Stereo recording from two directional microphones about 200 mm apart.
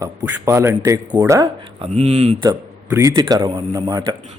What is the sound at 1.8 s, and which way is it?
A man's voice, 35° right (ahead or behind).